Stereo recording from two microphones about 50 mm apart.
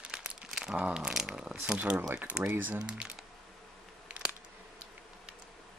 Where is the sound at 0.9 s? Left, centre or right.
Centre.